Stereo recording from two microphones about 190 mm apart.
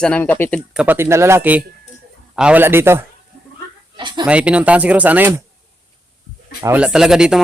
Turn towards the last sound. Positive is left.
turn(degrees=-5)  # may be behind; listen again after turning